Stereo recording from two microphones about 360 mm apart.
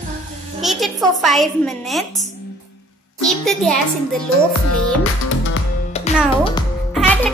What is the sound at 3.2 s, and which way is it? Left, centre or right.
Speech, centre.